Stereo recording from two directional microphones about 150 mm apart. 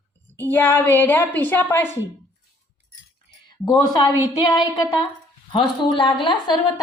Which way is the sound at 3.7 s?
30° left (ahead or behind).